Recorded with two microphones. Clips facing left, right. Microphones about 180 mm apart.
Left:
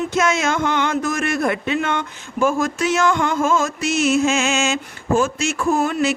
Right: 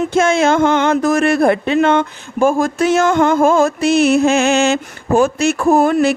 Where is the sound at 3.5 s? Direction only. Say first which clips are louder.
Right 7 dB; 60° right (ahead or behind).